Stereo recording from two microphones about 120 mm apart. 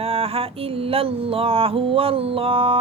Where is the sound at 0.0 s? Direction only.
55° right (ahead or behind).